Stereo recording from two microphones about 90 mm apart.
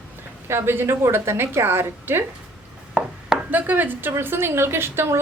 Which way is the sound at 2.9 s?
10° right (ahead or behind).